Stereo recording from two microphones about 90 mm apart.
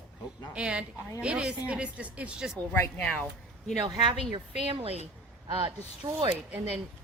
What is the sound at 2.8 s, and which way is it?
Speech, 15° left (ahead or behind).